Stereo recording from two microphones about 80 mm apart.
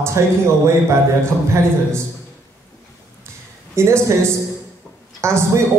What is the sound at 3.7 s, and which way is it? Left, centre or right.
Speech, right.